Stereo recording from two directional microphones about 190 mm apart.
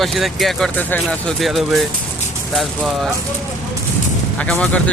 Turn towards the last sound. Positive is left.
turn(degrees=5)  # may be behind; listen again after turning